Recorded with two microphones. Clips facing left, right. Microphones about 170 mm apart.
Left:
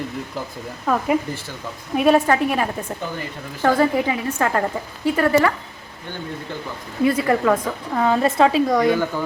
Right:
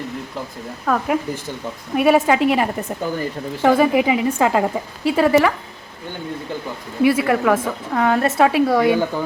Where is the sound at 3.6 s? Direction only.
15° right (ahead or behind).